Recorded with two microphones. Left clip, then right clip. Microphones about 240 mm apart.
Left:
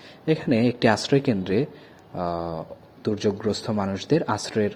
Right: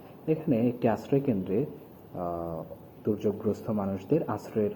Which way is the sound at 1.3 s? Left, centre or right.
Left.